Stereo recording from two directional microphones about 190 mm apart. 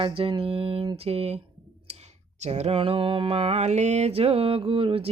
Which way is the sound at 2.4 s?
35° right (ahead or behind).